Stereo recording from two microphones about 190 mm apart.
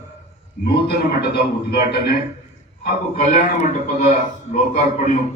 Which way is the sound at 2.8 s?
45° left (ahead or behind).